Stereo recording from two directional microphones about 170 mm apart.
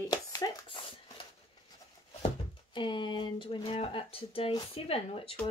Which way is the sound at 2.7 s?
30° left (ahead or behind).